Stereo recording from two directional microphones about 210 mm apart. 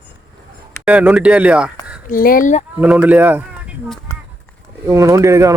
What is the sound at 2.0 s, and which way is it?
Speech, 40° left (ahead or behind).